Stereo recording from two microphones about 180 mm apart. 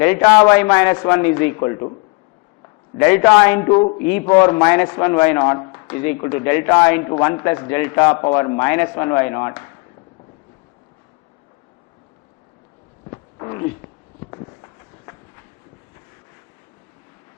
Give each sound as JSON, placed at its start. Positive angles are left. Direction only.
{"t": 0.0, "sound": "a man's voice", "side_deg": 10}
{"t": 3.0, "sound": "a man's voice", "side_deg": 15}
{"t": 13.1, "sound": "a sound", "side_deg": 20}